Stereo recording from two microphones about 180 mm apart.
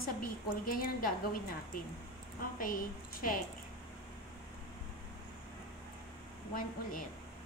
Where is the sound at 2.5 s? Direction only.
50° left (ahead or behind).